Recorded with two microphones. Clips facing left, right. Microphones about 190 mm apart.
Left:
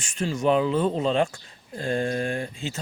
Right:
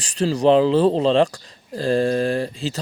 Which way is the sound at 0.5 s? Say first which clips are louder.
Right 7 dB; 90° right.